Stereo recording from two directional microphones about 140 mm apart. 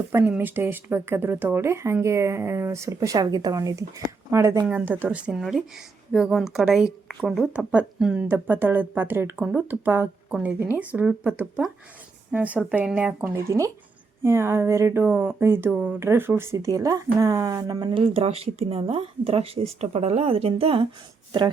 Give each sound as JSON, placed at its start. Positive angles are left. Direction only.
{"t": 0.1, "sound": "a woman's voice", "side_deg": -15}